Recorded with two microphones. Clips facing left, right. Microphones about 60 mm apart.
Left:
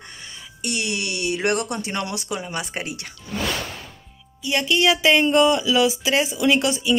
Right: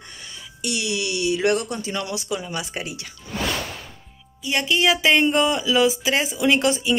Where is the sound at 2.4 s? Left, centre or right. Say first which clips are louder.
Left 1 dB; left.